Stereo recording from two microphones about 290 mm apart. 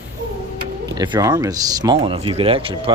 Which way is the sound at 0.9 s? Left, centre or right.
Centre.